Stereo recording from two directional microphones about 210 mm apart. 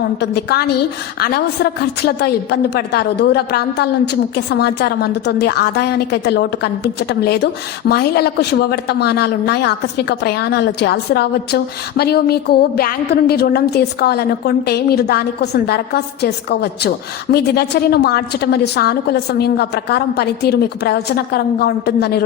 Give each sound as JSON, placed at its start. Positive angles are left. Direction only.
{"t": 0.2, "sound": "a woman's voice", "side_deg": 50}
{"t": 1.8, "sound": "a woman's voice", "side_deg": 50}